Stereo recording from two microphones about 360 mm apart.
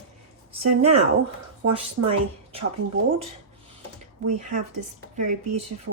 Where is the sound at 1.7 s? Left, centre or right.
Centre.